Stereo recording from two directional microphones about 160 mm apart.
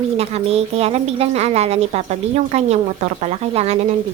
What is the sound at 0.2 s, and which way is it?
A woman's voice, 40° right (ahead or behind).